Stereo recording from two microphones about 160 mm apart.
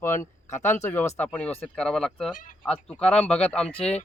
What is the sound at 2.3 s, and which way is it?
Speech, 55° left (ahead or behind).